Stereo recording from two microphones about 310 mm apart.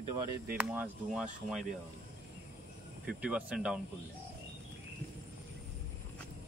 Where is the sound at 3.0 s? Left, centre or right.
Centre.